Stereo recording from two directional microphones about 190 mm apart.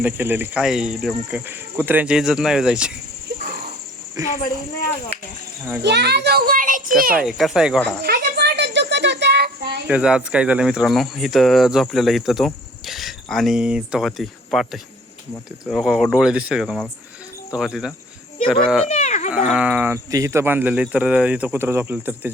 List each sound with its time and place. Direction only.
0.0 s speech: 10° right (ahead or behind)
5.8 s a child's voice: 65° right (ahead or behind)
7.2 s speech: centre (ahead or behind)
8.0 s child singing: 55° right (ahead or behind)
9.8 s speech: 5° right (ahead or behind)
18.9 s a sound: 35° left (ahead or behind)
19.3 s speech: centre (ahead or behind)